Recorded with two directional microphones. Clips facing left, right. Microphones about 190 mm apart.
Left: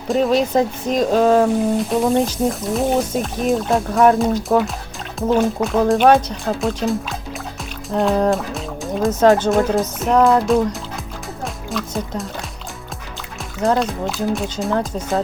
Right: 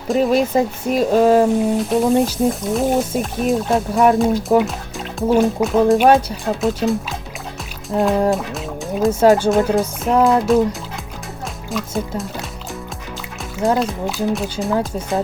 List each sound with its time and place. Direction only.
0.1 s speech: 5° right (ahead or behind)
4.5 s speech: 15° right (ahead or behind)
13.6 s speech: centre (ahead or behind)